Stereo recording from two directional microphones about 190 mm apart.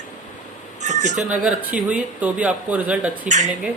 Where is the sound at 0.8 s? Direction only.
40° right (ahead or behind).